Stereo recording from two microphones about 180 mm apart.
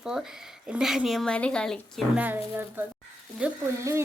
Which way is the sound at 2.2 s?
10° right (ahead or behind).